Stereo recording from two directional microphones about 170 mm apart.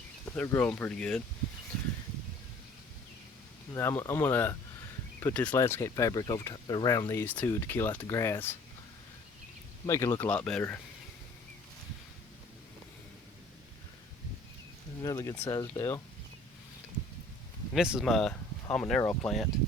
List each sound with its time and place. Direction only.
0.3 s speech: 15° left (ahead or behind)
3.8 s speech: 15° left (ahead or behind)
9.8 s speech: 20° left (ahead or behind)
10.2 s speech: 5° left (ahead or behind)
15.0 s speech: 20° left (ahead or behind)
17.7 s speech: 5° right (ahead or behind)